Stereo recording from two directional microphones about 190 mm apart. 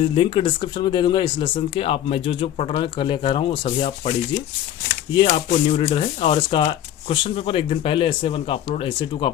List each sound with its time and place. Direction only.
0.0 s speech: 30° left (ahead or behind)
5.1 s speech: 30° left (ahead or behind)